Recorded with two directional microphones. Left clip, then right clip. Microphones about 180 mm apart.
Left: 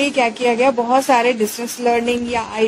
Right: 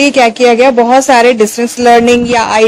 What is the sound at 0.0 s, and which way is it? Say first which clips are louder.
A woman's voice: right 10 dB; 50° right (ahead or behind).